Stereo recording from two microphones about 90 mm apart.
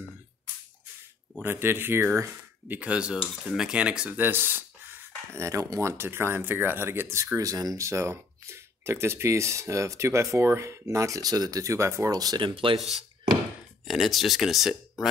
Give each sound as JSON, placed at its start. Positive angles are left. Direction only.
{"t": 1.4, "sound": "speech", "side_deg": -25}
{"t": 7.3, "sound": "speech", "side_deg": -40}
{"t": 12.1, "sound": "speech", "side_deg": -45}
{"t": 12.4, "sound": "speech", "side_deg": -70}
{"t": 13.8, "sound": "speech", "side_deg": 0}